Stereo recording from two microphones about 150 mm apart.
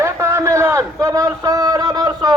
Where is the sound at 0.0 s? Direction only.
20° right (ahead or behind).